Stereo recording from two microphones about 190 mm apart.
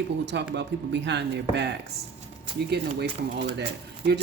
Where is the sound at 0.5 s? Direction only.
65° right (ahead or behind).